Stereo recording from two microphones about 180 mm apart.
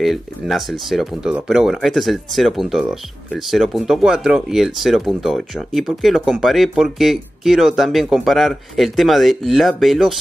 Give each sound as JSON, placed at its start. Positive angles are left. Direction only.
{"t": 0.0, "sound": "speech", "side_deg": 0}